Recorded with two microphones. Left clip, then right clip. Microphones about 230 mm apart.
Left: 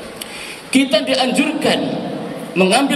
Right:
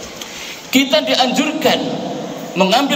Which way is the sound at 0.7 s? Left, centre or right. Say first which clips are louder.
Right 2 dB; centre.